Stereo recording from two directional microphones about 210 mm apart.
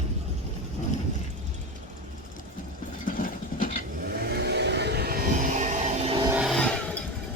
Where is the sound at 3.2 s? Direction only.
40° left (ahead or behind).